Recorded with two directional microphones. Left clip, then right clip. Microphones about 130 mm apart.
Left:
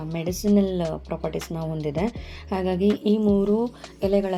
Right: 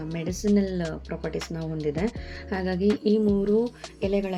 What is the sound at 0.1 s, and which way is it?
Speech, 35° left (ahead or behind).